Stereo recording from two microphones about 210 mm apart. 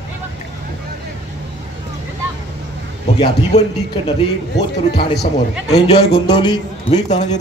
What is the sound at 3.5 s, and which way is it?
Speech, 35° left (ahead or behind).